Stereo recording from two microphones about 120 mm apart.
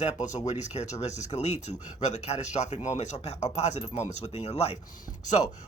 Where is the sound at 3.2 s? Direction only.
65° left (ahead or behind).